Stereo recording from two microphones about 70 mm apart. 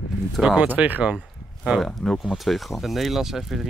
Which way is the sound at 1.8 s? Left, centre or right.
Centre.